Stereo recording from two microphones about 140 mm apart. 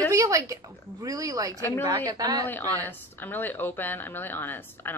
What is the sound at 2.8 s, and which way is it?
Speech, 15° left (ahead or behind).